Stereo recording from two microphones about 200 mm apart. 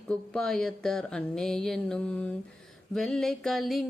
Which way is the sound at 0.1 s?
5° left (ahead or behind).